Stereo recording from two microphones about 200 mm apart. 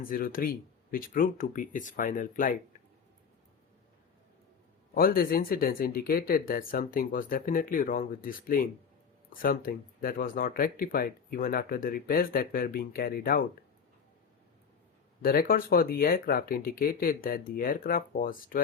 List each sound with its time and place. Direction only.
0.1 s speech: 45° left (ahead or behind)
4.9 s speech: 45° left (ahead or behind)
15.2 s speech: 50° left (ahead or behind)